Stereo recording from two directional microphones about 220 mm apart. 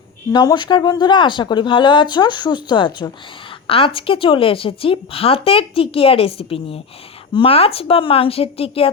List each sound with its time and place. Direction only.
0.3 s a woman's voice: 20° left (ahead or behind)